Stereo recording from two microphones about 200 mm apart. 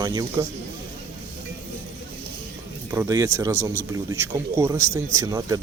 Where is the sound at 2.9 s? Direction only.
15° right (ahead or behind).